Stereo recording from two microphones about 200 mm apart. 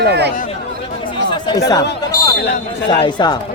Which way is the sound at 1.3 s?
20° left (ahead or behind).